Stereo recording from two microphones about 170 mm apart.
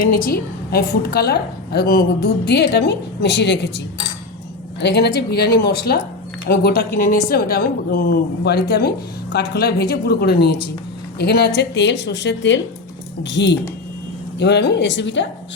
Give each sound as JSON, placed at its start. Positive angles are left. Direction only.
{"t": 0.0, "sound": "speech", "side_deg": 55}
{"t": 4.8, "sound": "speech", "side_deg": 80}